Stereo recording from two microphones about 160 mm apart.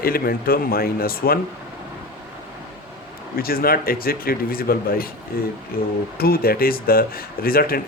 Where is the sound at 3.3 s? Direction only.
65° left (ahead or behind).